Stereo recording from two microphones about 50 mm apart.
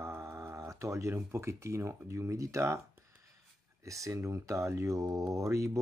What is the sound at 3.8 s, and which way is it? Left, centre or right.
Speech, right.